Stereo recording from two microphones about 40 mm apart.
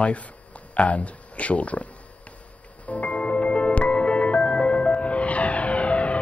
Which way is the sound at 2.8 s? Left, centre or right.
Left.